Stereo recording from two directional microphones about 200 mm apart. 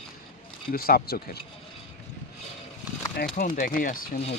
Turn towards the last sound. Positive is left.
turn(degrees=45)  # may be behind; listen again after turning